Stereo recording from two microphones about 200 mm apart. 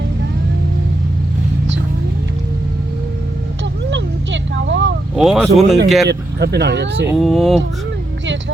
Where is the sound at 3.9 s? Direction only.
65° right (ahead or behind).